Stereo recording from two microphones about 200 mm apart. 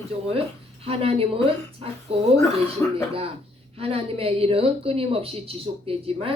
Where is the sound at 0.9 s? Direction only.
30° right (ahead or behind).